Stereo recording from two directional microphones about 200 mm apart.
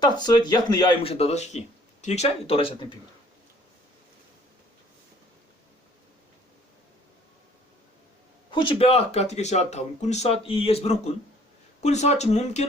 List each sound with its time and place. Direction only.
0.0 s speech: 20° left (ahead or behind)
8.4 s speech: 25° left (ahead or behind)